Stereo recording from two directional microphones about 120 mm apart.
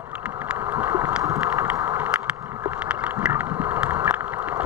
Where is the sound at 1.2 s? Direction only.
25° right (ahead or behind).